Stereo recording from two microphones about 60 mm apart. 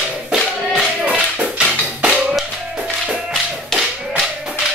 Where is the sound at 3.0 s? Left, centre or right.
Centre.